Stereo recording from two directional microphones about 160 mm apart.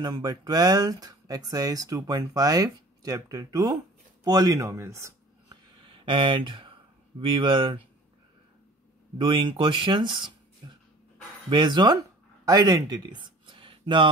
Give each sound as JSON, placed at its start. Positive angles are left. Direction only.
{"t": 0.0, "sound": "speech", "side_deg": -25}
{"t": 5.9, "sound": "speech", "side_deg": -30}
{"t": 9.2, "sound": "speech", "side_deg": -30}
{"t": 11.5, "sound": "speech", "side_deg": -30}